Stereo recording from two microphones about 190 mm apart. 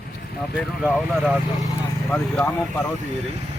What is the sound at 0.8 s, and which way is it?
Speech, 5° right (ahead or behind).